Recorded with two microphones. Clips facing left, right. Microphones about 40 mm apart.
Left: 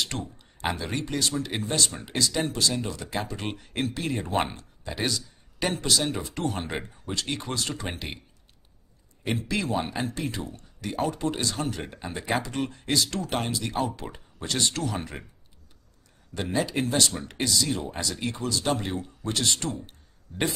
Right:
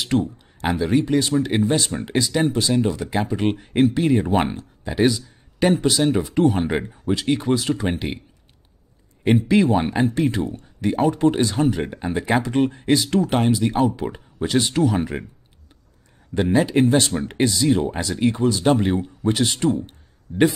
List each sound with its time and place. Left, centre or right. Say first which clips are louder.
0.0 s speech: right 10 dB; centre
1.1 s speech: right 9 dB; centre
9.2 s speech: right 12 dB; right
16.3 s speech: right 9 dB; centre
18.5 s speech: right 9 dB; centre